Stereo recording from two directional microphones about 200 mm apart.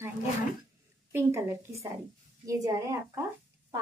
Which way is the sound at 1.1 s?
10° right (ahead or behind).